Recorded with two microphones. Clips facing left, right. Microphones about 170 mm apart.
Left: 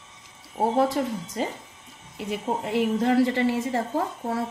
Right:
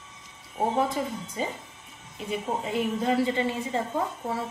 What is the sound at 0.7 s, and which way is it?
A woman's voice, 80° left.